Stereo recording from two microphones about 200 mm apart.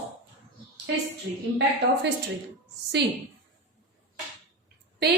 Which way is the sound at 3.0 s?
55° right (ahead or behind).